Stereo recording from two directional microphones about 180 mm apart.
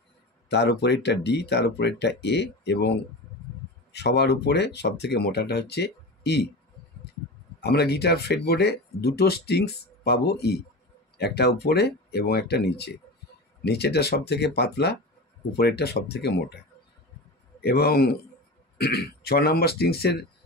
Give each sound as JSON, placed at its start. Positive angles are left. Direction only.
{"t": 0.5, "sound": "speech", "side_deg": 70}
{"t": 3.9, "sound": "speech", "side_deg": 70}
{"t": 7.6, "sound": "speech", "side_deg": 65}
{"t": 17.6, "sound": "speech", "side_deg": 60}